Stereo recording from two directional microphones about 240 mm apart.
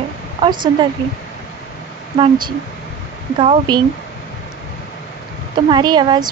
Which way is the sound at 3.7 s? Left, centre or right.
Centre.